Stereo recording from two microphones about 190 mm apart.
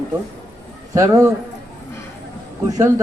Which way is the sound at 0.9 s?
15° right (ahead or behind).